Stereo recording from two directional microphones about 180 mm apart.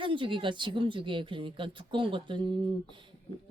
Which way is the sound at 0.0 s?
30° right (ahead or behind).